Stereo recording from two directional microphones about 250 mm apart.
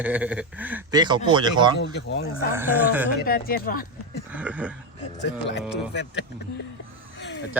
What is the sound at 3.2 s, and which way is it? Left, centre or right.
Speech, left.